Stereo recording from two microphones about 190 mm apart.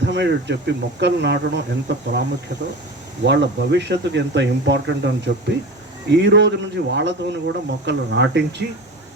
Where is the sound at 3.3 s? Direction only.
65° right (ahead or behind).